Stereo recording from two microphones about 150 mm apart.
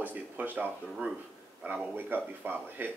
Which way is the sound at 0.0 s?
10° right (ahead or behind).